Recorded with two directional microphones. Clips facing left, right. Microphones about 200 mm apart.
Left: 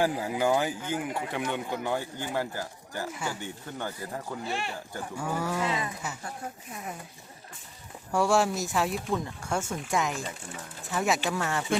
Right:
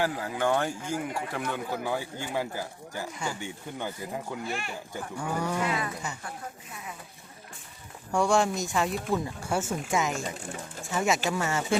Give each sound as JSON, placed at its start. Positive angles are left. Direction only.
{"t": 0.0, "sound": "speech", "side_deg": 15}
{"t": 3.1, "sound": "speech", "side_deg": 5}
{"t": 3.4, "sound": "speech", "side_deg": -15}
{"t": 4.4, "sound": "speech", "side_deg": 30}
{"t": 4.9, "sound": "speech", "side_deg": 5}
{"t": 5.6, "sound": "speech", "side_deg": 25}
{"t": 8.1, "sound": "speech", "side_deg": 5}